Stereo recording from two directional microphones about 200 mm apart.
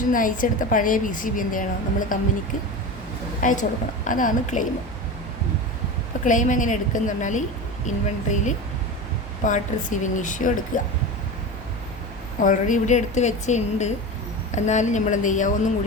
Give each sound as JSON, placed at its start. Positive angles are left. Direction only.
{"t": 0.1, "sound": "a woman's voice", "side_deg": 40}
{"t": 3.4, "sound": "a woman's voice", "side_deg": 40}
{"t": 6.2, "sound": "a woman's voice", "side_deg": 40}
{"t": 12.4, "sound": "a woman's voice", "side_deg": 40}